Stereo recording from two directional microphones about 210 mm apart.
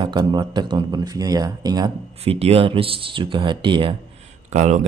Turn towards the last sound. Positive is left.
turn(degrees=-35)  # may be behind; listen again after turning